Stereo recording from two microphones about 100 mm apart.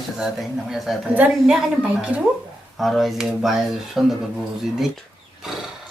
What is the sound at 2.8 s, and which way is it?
Speech, centre (ahead or behind).